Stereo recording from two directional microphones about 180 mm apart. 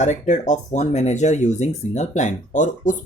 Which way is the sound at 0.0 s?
40° left (ahead or behind).